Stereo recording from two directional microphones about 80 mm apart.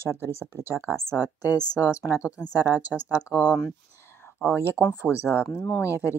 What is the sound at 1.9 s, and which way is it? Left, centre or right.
Speech, left.